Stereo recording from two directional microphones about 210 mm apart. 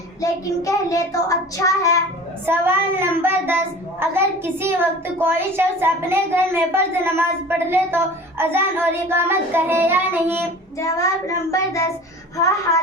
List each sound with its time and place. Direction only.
0.2 s child singing: 15° left (ahead or behind)
2.5 s a child's voice: 10° right (ahead or behind)
10.8 s child singing: 15° left (ahead or behind)